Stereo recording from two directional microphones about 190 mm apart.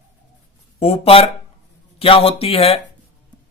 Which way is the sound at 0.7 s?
30° left (ahead or behind).